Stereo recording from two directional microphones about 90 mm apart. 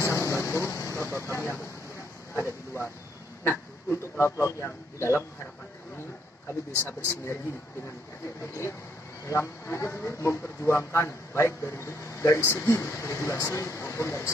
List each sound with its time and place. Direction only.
0.0 s vehicle: 35° left (ahead or behind)
0.5 s vehicle: 20° left (ahead or behind)
2.3 s speech: 30° left (ahead or behind)
6.8 s speech: 30° left (ahead or behind)
9.3 s a man's voice: 30° left (ahead or behind)